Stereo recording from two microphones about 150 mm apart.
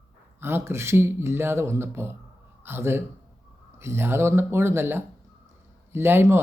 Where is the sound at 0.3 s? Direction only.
15° right (ahead or behind).